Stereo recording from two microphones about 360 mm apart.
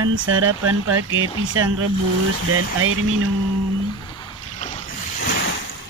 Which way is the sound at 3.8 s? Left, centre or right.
Centre.